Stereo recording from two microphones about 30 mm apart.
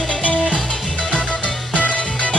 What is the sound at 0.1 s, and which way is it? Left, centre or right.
Music, left.